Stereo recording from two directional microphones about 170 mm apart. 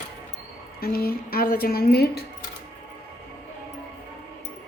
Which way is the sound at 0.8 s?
60° left (ahead or behind).